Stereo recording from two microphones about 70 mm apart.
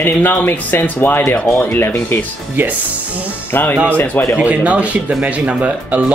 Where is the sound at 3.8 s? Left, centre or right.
Left.